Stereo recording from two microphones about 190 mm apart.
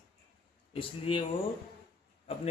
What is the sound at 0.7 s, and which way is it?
Speech, 25° left (ahead or behind).